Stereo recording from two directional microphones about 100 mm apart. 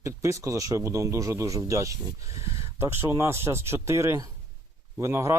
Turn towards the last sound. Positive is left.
turn(degrees=-25)  # may be behind; listen again after turning